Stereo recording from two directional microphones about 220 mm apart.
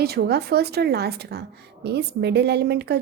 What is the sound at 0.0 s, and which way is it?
A woman's voice, 45° right (ahead or behind).